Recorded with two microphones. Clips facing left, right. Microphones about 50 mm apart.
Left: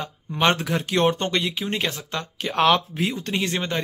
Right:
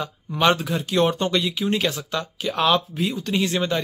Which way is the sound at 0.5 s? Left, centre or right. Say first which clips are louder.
Even; left.